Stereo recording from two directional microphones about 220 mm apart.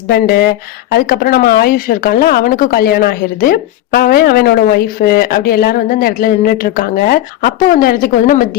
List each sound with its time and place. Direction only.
0.1 s speech: 45° left (ahead or behind)